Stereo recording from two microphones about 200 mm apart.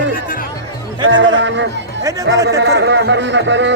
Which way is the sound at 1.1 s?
65° right (ahead or behind).